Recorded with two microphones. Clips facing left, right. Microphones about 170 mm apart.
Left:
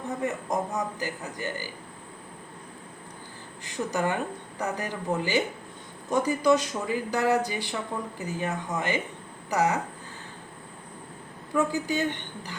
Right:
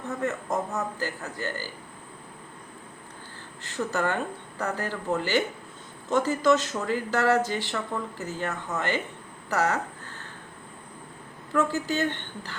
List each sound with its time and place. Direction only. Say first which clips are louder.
0.1 s a woman's voice: right 1 dB; 15° left (ahead or behind)
3.6 s a woman's voice: even; 15° left (ahead or behind)
9.5 s a sound: left 1 dB; 15° left (ahead or behind)
11.5 s a woman's voice: even; 15° left (ahead or behind)